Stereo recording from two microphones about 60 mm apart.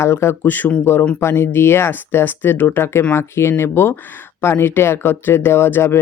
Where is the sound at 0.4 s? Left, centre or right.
Left.